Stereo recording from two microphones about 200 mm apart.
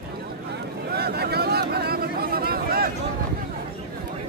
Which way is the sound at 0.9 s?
50° right (ahead or behind).